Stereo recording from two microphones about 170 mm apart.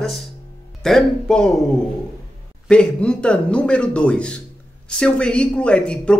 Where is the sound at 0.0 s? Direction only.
Centre (ahead or behind).